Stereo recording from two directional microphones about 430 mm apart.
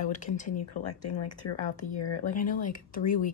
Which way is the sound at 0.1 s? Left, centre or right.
Centre.